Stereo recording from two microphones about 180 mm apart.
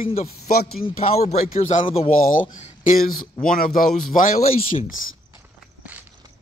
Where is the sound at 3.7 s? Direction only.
45° left (ahead or behind).